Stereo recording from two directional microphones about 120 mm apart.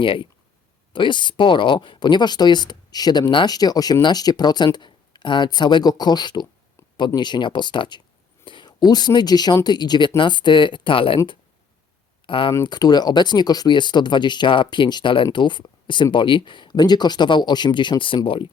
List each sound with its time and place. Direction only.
0.0 s speech: 45° left (ahead or behind)
12.2 s speech: 45° left (ahead or behind)